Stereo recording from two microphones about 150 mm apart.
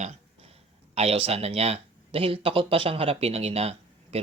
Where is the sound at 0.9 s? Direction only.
40° right (ahead or behind).